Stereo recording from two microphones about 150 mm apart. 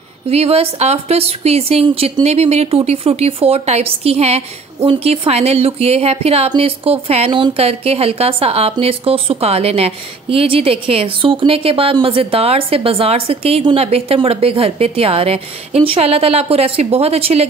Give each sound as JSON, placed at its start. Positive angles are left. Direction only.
{"t": 0.3, "sound": "a woman's voice", "side_deg": -40}